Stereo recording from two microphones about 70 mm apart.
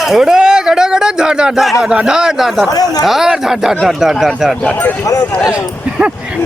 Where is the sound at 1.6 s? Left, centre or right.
Centre.